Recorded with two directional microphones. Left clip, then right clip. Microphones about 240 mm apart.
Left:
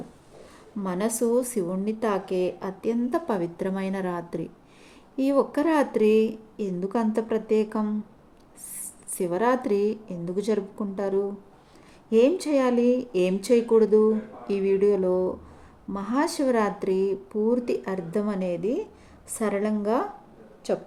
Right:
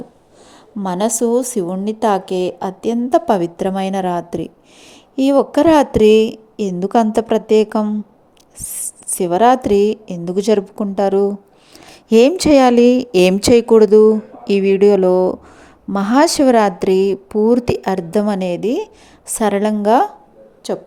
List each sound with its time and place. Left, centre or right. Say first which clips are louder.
0.8 s a woman's voice: right 9 dB; right